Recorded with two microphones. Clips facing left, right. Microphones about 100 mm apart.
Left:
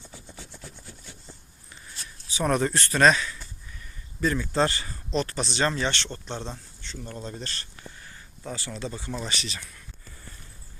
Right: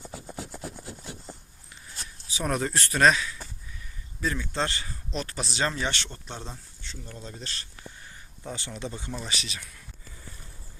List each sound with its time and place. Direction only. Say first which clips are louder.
0.5 s wood: right 7 dB; 40° right (ahead or behind)
0.9 s a sound: right 6 dB; 65° right (ahead or behind)
2.3 s speech: left 4 dB; centre (ahead or behind)
8.4 s speech: left 2 dB; 20° right (ahead or behind)
9.1 s speech: left 2 dB; centre (ahead or behind)